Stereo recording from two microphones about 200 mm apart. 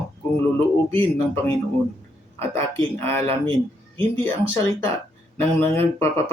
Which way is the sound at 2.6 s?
10° left (ahead or behind).